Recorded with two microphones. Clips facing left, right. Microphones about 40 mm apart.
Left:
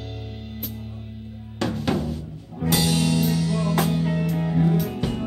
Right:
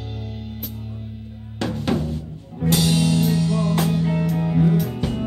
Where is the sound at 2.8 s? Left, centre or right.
Right.